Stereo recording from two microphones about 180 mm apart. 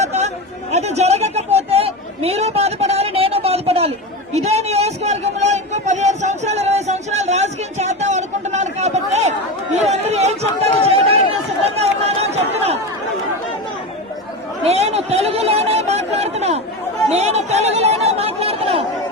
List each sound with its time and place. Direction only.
0.0 s chatter: 40° right (ahead or behind)
0.7 s a sound: 35° right (ahead or behind)
10.8 s run: 35° right (ahead or behind)
11.8 s chatter: 35° right (ahead or behind)
14.7 s a sound: 35° right (ahead or behind)
17.1 s chatter: 35° right (ahead or behind)